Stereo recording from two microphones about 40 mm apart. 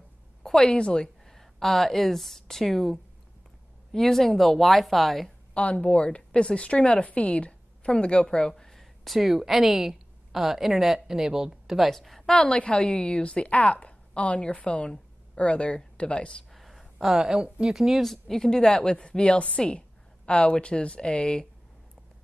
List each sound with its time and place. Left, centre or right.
0.4 s a sound: centre
0.7 s a woman's voice: left
1.2 s a woman's voice: centre
5.5 s a woman's voice: left; by 8.8 s centre
9.0 s a woman's voice: centre
12.0 s a woman's voice: centre
12.4 s a woman's voice: left
16.5 s a sound: centre
17.1 s a woman's voice: centre
17.6 s a woman's voice: centre
18.0 s a woman's voice: centre; by 21.5 s left